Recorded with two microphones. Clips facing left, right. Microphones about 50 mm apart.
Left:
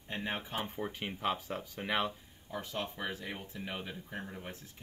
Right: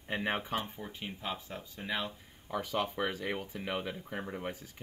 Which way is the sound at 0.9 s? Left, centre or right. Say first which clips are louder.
Left 4 dB; left.